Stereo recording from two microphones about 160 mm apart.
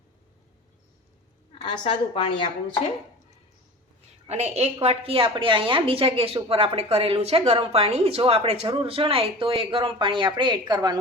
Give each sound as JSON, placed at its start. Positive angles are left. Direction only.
{"t": 1.8, "sound": "a woman's voice", "side_deg": 30}
{"t": 4.3, "sound": "a woman's voice", "side_deg": -45}